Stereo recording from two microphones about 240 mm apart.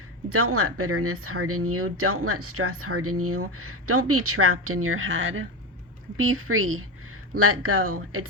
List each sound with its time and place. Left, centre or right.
0.3 s speech: right